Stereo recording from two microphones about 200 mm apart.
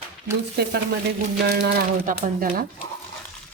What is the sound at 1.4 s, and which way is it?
Speech, 55° right (ahead or behind).